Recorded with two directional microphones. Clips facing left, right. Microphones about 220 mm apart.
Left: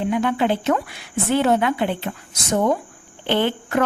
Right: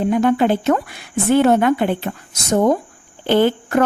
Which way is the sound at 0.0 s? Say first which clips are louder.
Right 5 dB; 45° right (ahead or behind).